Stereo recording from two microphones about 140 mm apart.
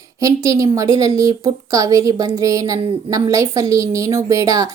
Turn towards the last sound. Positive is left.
turn(degrees=-25)  # may be behind; listen again after turning